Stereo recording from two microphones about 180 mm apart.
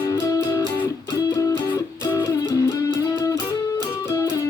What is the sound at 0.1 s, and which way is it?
Music, 20° left (ahead or behind).